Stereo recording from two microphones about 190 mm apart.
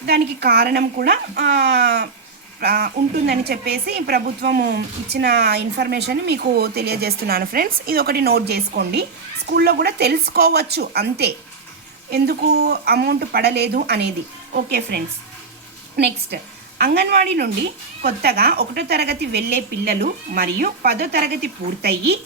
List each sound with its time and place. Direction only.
0.0 s speech: 60° right (ahead or behind)
16.3 s speech: 55° right (ahead or behind)